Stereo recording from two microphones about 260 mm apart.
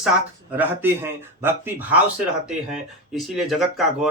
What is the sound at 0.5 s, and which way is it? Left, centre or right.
Speech, centre.